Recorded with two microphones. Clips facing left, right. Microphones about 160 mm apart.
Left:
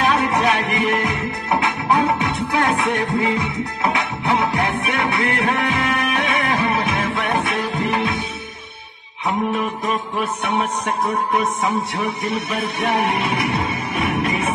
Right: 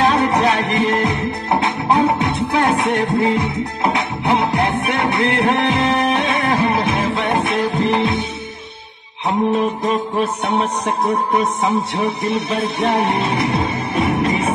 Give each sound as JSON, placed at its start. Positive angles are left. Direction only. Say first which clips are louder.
{"t": 0.0, "sound": "music", "louder": "right 3 dB", "side_deg": -25}
{"t": 9.5, "sound": "music", "louder": "right 5 dB", "side_deg": -30}